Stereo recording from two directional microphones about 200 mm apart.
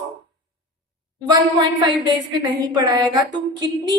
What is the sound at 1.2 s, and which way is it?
A woman's voice, 20° right (ahead or behind).